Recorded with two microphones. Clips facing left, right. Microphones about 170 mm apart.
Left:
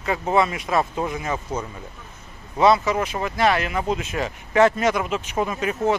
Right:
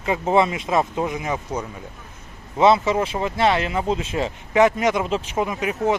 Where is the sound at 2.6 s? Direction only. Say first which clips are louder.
Right 1 dB; 25° right (ahead or behind).